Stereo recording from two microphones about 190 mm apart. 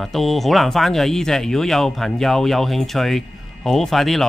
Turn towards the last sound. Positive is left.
turn(degrees=0)  # may be behind; listen again after turning